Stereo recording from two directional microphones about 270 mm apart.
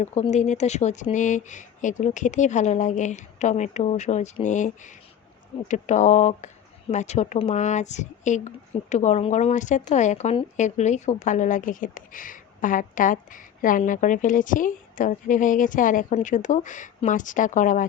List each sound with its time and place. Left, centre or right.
0.0 s speech: left